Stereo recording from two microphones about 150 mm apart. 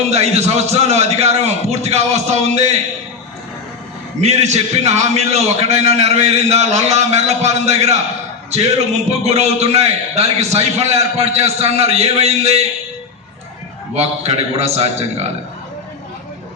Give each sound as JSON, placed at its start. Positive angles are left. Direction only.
{"t": 0.1, "sound": "a man's voice", "side_deg": -45}
{"t": 4.2, "sound": "a man's voice", "side_deg": -45}
{"t": 9.2, "sound": "a man's voice", "side_deg": -45}
{"t": 13.9, "sound": "a man's voice", "side_deg": -45}